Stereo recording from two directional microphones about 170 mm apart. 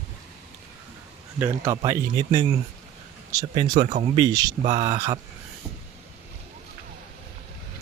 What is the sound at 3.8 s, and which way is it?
Speech, 40° right (ahead or behind).